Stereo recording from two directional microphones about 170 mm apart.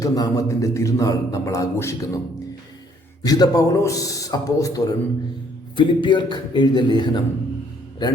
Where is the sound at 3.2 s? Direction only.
20° left (ahead or behind).